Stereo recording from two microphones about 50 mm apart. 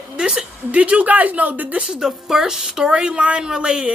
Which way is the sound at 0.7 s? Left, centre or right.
Right.